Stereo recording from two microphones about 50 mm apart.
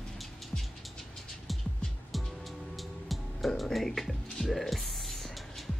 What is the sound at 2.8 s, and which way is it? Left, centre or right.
Music, centre.